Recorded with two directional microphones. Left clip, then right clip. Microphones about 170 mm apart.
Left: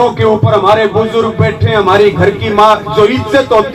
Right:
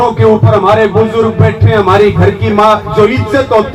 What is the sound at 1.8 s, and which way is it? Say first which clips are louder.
A man's voice: even; 35° left (ahead or behind).